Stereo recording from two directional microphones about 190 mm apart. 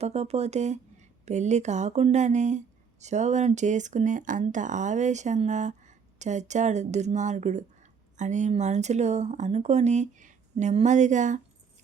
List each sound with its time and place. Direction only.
0.0 s speech: 35° right (ahead or behind)